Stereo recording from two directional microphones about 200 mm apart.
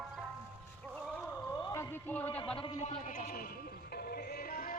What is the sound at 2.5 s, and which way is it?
Speech, 30° left (ahead or behind).